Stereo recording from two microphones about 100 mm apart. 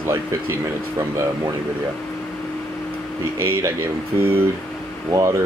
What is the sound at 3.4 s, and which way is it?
Speech, 25° right (ahead or behind).